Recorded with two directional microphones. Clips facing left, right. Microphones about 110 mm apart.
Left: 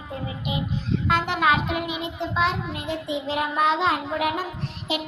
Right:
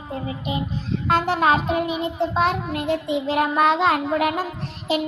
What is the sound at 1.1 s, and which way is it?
A child's voice, 40° right (ahead or behind).